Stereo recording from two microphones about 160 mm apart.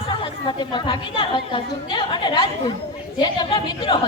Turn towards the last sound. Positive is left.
turn(degrees=30)  # may be behind; listen again after turning